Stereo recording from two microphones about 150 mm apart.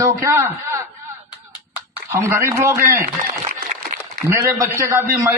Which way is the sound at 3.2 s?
75° right (ahead or behind).